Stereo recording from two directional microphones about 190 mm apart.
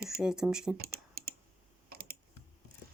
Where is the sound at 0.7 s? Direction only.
55° right (ahead or behind).